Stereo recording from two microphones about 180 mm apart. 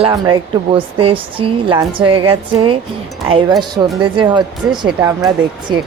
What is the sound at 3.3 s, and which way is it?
A man's voice, 30° right (ahead or behind).